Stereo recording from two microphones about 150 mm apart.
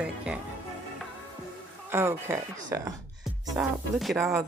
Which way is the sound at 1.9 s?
15° right (ahead or behind).